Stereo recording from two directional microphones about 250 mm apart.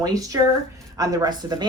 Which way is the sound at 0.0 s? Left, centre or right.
Centre.